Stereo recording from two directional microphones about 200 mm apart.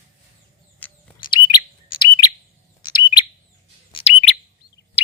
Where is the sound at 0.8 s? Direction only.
10° left (ahead or behind).